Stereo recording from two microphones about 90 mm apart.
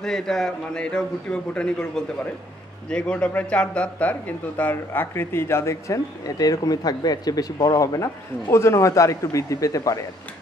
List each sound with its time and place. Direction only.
0.0 s a man's voice: 5° left (ahead or behind); by 10.0 s 40° left (ahead or behind)